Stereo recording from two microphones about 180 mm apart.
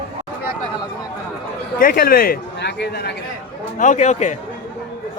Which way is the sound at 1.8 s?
50° left (ahead or behind).